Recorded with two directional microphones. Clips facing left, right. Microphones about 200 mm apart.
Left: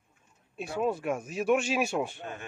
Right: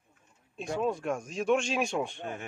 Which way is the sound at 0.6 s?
5° left (ahead or behind).